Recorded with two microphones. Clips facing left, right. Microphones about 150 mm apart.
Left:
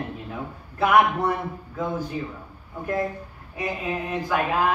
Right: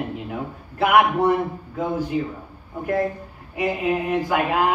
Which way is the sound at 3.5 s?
15° right (ahead or behind).